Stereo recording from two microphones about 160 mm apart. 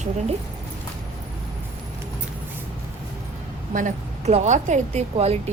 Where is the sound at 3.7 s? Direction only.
50° right (ahead or behind).